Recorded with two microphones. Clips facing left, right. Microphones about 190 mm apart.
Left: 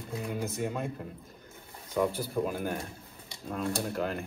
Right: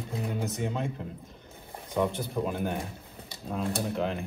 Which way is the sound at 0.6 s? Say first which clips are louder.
Right 1 dB; 5° left (ahead or behind).